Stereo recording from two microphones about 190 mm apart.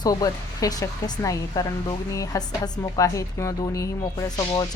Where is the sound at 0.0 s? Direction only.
20° left (ahead or behind).